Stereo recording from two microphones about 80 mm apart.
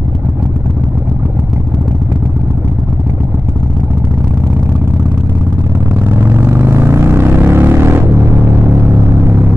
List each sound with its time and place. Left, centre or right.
6.3 s vehicle: right